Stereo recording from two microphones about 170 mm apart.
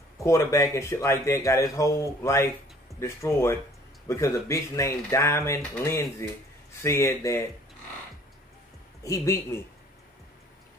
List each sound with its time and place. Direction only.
0.2 s speech: 20° left (ahead or behind)
9.0 s speech: 20° left (ahead or behind)